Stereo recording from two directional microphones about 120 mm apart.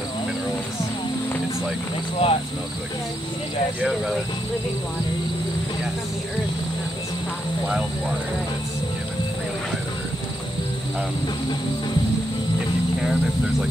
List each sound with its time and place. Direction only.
2.2 s speech: 50° left (ahead or behind)